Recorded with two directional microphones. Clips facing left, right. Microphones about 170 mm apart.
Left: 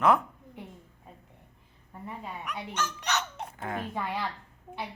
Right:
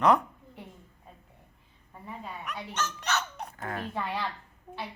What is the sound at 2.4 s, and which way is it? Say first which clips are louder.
Speech: left 1 dB; 10° left (ahead or behind).